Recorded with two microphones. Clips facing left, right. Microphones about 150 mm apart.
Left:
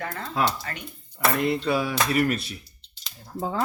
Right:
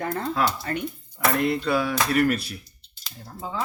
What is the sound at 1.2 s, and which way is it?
Speech, centre (ahead or behind).